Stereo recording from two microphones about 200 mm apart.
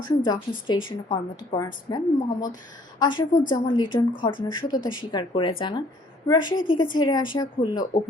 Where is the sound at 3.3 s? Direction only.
40° left (ahead or behind).